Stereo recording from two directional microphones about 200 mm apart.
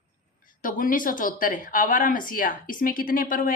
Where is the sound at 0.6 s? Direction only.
45° left (ahead or behind).